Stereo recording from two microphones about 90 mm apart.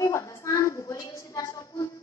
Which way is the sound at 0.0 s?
35° left (ahead or behind).